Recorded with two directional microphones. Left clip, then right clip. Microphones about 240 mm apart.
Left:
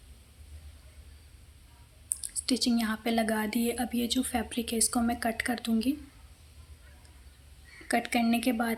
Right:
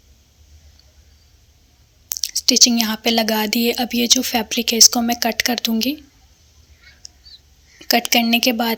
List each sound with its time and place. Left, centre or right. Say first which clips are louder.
2.2 s a woman's voice: right 16 dB; right
8.1 s speech: right 12 dB; right